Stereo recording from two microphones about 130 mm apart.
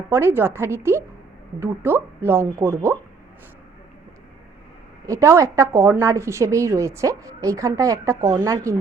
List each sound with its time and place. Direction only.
0.1 s a woman's voice: 20° right (ahead or behind)
5.0 s a woman's voice: 25° right (ahead or behind)